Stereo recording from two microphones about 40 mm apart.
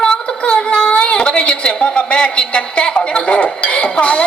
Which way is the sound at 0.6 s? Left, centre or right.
Left.